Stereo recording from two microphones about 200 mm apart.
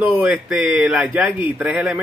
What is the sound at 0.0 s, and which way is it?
A man's voice, 5° right (ahead or behind).